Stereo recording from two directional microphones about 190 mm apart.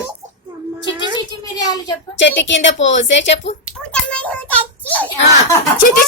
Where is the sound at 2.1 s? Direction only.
75° left (ahead or behind).